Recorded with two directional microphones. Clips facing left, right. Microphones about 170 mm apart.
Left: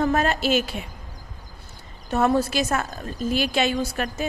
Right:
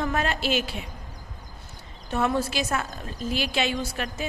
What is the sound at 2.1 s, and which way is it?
A woman's voice, 45° left (ahead or behind).